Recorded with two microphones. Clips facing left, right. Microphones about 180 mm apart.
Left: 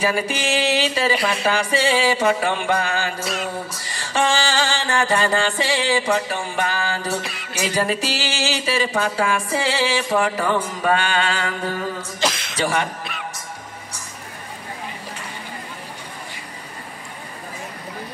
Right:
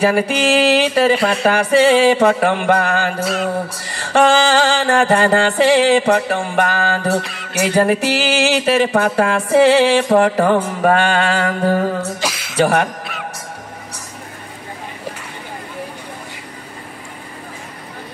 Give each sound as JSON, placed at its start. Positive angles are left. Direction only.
{"t": 0.0, "sound": "music", "side_deg": -60}
{"t": 12.2, "sound": "a sound", "side_deg": -10}
{"t": 12.5, "sound": "speech", "side_deg": -60}